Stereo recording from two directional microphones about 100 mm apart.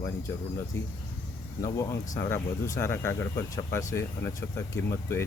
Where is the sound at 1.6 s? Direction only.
30° left (ahead or behind).